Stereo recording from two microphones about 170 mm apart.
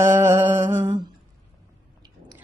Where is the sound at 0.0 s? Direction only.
15° right (ahead or behind).